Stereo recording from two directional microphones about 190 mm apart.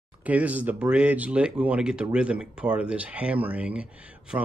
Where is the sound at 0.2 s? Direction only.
10° right (ahead or behind).